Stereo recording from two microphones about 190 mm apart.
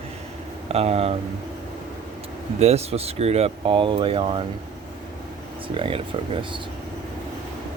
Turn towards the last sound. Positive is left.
turn(degrees=-25)  # may be behind; listen again after turning